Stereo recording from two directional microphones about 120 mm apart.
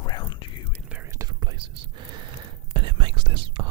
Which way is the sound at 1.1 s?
30° right (ahead or behind).